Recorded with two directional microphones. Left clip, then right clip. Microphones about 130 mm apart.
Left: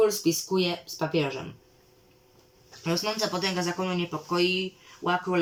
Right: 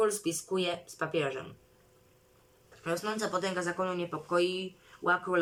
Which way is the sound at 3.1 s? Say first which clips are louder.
Left 4 dB; 20° left (ahead or behind).